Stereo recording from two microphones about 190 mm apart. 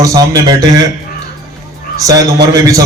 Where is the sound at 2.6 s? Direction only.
20° right (ahead or behind).